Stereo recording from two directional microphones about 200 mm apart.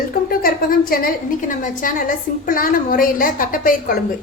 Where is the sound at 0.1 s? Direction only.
45° left (ahead or behind).